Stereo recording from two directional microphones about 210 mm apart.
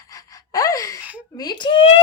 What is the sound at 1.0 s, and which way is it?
Speech, 5° right (ahead or behind).